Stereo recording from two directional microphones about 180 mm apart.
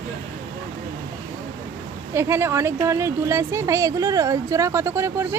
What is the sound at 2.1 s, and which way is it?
Speech, 15° right (ahead or behind).